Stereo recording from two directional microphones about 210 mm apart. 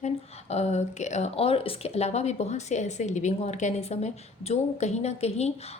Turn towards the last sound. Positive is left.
turn(degrees=30)  # may be behind; listen again after turning